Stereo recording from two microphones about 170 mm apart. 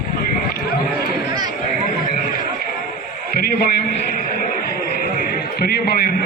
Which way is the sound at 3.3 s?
60° left (ahead or behind).